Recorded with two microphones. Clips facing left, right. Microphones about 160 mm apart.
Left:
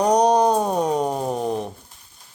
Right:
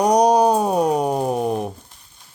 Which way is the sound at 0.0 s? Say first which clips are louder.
Right 2 dB; 10° right (ahead or behind).